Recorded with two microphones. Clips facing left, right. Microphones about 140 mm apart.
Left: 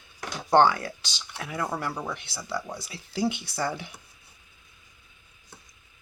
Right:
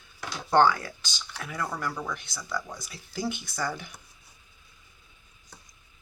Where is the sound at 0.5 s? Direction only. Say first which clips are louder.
Left 2 dB; 25° left (ahead or behind).